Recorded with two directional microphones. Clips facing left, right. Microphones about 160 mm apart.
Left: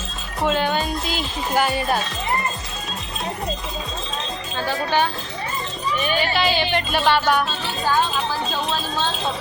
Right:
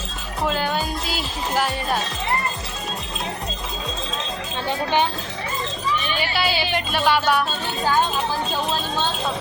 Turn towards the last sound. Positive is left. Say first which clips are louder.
# left 1 dB
turn(degrees=-5)  # may be behind; listen again after turning